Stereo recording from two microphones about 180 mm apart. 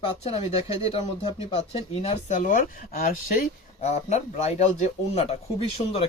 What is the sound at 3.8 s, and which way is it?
Speech, 40° left (ahead or behind).